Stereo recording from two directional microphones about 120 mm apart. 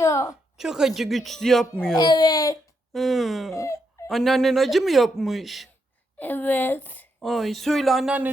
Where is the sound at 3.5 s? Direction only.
25° left (ahead or behind).